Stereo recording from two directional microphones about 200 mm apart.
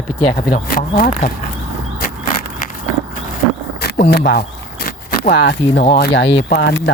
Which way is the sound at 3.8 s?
50° left (ahead or behind).